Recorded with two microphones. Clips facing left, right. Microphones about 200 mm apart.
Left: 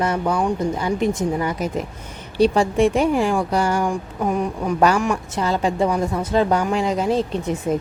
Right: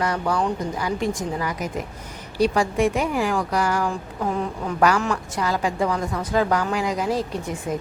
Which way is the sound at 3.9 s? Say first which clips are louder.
Left 4 dB; 15° left (ahead or behind).